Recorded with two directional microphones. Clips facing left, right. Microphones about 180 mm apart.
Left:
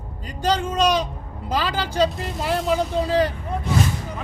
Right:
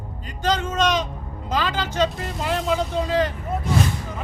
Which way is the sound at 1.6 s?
35° left (ahead or behind).